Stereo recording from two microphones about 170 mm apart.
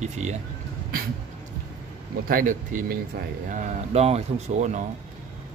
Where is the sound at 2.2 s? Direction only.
55° right (ahead or behind).